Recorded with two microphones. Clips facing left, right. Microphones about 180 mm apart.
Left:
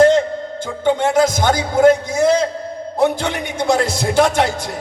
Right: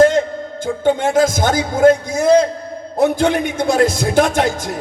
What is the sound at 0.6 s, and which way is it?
A man's voice, 50° right (ahead or behind).